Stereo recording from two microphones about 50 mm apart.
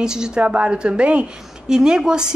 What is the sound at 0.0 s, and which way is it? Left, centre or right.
A woman's voice, centre.